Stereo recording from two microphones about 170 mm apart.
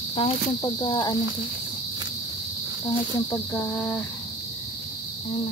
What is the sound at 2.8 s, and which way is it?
Speech, 20° left (ahead or behind).